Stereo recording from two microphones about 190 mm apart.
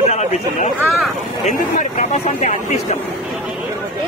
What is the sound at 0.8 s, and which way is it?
Speech, centre (ahead or behind).